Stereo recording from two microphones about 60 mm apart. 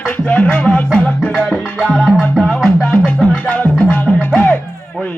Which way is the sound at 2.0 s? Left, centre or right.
Centre.